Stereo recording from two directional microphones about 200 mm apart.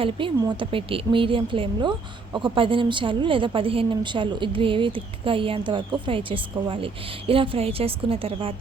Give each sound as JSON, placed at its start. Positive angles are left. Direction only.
{"t": 0.0, "sound": "speech", "side_deg": -25}